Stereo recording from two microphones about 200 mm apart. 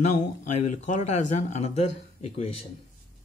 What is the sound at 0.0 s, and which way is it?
A man's voice, 35° left (ahead or behind).